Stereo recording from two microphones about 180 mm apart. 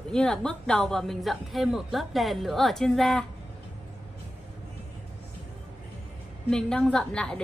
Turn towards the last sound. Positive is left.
turn(degrees=5)  # may be behind; listen again after turning